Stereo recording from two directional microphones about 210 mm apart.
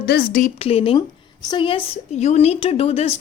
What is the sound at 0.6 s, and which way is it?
A woman's voice, 30° left (ahead or behind).